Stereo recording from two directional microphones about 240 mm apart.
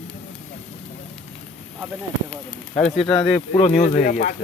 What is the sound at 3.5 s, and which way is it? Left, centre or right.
Speech, left.